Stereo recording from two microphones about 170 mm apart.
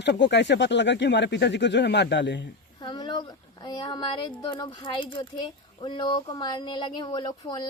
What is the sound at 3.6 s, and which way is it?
Speech, 30° left (ahead or behind).